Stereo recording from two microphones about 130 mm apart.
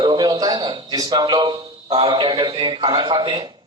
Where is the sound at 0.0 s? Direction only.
35° right (ahead or behind).